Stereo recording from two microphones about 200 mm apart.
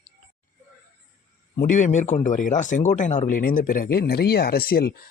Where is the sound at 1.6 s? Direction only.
40° left (ahead or behind).